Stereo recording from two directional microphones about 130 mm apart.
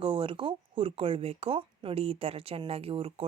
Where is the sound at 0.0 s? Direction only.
40° right (ahead or behind).